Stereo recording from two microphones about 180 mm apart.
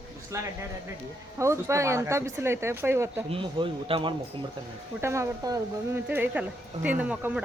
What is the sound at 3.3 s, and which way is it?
Speech, 30° right (ahead or behind).